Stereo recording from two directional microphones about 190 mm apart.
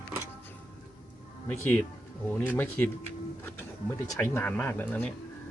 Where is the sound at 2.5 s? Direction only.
10° left (ahead or behind).